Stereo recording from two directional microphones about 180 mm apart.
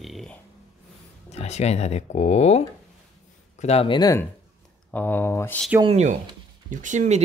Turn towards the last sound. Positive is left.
turn(degrees=-40)  # may be behind; listen again after turning